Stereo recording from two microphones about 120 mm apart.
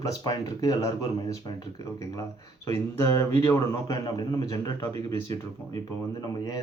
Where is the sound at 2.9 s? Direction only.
25° left (ahead or behind).